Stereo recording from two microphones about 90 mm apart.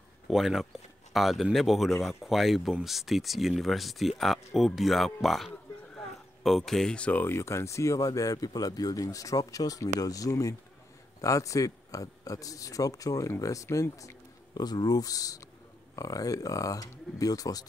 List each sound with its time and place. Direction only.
0.3 s speech: 5° right (ahead or behind); by 7.3 s 20° left (ahead or behind)
7.3 s speech: 30° left (ahead or behind)
14.5 s speech: 50° left (ahead or behind)